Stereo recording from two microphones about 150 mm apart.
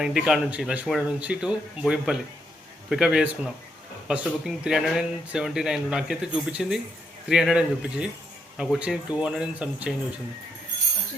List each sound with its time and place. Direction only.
0.0 s speech: 5° right (ahead or behind)